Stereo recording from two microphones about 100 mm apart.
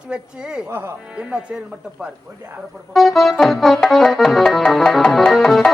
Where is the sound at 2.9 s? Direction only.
Centre (ahead or behind).